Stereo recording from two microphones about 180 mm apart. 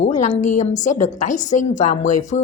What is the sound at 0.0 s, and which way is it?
A woman's voice, 40° left (ahead or behind).